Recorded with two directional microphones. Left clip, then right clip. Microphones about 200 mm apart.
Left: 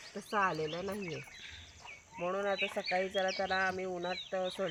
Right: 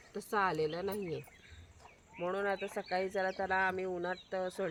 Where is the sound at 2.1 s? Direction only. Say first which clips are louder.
Left 1 dB; 20° right (ahead or behind).